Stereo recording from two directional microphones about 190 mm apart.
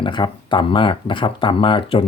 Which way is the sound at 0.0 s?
25° left (ahead or behind).